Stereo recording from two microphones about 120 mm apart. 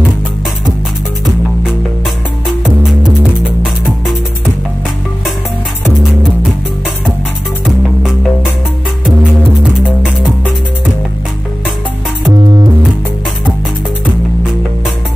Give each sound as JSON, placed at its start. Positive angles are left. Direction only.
{"t": 2.8, "sound": "music", "side_deg": -5}
{"t": 7.6, "sound": "music", "side_deg": -5}
{"t": 12.3, "sound": "music", "side_deg": -35}